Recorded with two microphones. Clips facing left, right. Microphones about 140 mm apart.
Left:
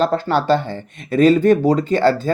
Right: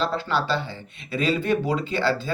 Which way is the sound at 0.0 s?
45° left (ahead or behind).